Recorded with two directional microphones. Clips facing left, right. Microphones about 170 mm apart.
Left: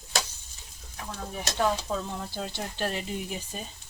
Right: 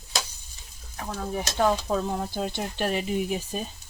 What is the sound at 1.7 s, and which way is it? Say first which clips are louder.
Speech: right 5 dB; 50° right (ahead or behind).